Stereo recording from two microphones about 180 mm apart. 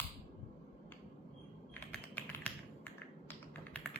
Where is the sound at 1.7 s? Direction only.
10° left (ahead or behind).